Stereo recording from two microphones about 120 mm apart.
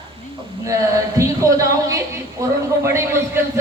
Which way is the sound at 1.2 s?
30° right (ahead or behind).